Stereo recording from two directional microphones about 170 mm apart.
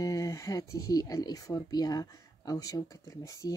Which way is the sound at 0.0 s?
20° left (ahead or behind).